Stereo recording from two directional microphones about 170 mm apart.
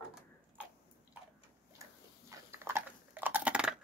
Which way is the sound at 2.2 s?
15° right (ahead or behind).